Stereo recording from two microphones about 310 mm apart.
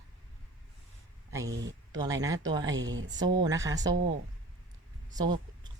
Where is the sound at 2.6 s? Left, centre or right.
Right.